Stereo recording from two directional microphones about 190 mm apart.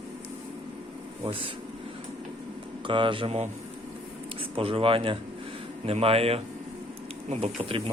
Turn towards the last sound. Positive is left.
turn(degrees=-30)  # may be behind; listen again after turning